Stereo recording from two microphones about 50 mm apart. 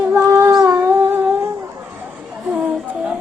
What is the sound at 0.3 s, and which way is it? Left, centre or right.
Humming, right.